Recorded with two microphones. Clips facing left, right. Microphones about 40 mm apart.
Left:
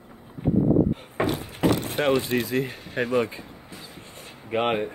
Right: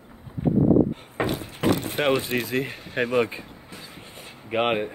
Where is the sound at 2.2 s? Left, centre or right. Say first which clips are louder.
Left 1 dB; right.